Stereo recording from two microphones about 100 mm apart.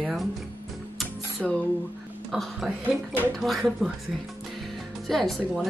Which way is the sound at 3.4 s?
Centre (ahead or behind).